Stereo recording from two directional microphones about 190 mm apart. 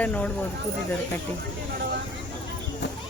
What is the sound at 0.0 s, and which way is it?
Speech, 10° left (ahead or behind).